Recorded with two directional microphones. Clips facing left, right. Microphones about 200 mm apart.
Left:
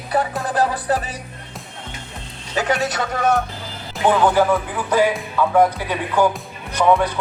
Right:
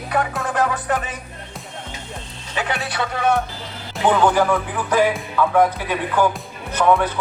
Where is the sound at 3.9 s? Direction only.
5° left (ahead or behind).